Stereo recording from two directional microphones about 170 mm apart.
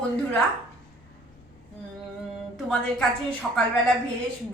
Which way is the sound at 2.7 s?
5° left (ahead or behind).